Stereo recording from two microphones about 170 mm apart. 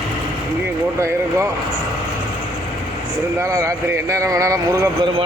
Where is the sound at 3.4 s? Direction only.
20° right (ahead or behind).